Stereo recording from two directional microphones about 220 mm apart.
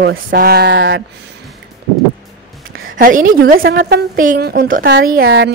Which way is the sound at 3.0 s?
40° right (ahead or behind).